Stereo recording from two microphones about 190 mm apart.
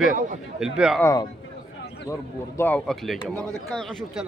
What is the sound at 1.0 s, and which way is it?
Speech, 20° left (ahead or behind).